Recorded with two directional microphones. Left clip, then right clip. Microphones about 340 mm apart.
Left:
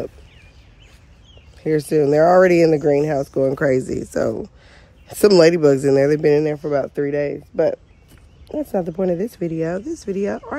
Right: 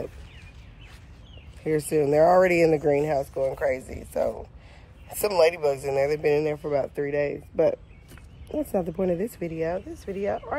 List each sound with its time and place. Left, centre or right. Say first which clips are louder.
1.6 s speech: left 6 dB; left